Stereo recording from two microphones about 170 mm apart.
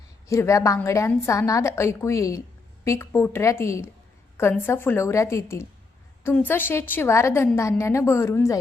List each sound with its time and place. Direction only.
0.3 s a woman's voice: 15° left (ahead or behind)